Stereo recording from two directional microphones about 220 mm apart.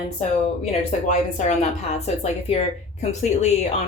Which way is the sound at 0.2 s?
30° left (ahead or behind).